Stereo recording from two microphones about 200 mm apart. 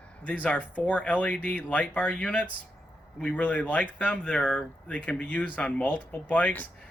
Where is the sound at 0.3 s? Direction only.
5° left (ahead or behind).